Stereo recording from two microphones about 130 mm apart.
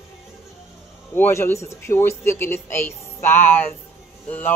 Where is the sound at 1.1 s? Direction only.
15° left (ahead or behind).